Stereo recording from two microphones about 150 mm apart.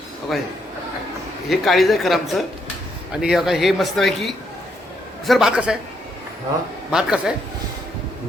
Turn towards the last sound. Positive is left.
turn(degrees=-5)  # may be behind; listen again after turning